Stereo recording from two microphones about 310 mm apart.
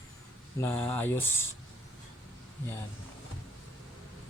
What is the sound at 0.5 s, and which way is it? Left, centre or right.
Speech, centre.